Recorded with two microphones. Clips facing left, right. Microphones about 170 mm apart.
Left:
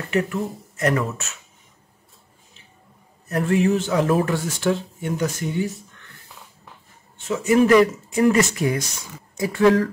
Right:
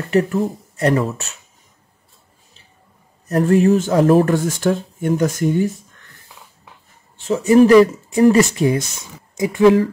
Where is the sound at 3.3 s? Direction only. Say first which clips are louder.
Right 6 dB; 40° right (ahead or behind).